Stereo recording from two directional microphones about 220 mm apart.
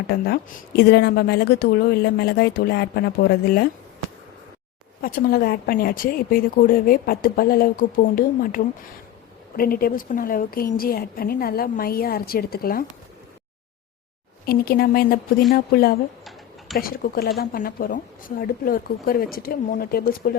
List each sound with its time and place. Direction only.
0.1 s a woman's voice: 45° left (ahead or behind)
5.0 s speech: 40° left (ahead or behind)
14.4 s a woman's voice: 45° left (ahead or behind)